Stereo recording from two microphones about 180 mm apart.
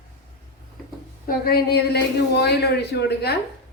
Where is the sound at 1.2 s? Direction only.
55° left (ahead or behind).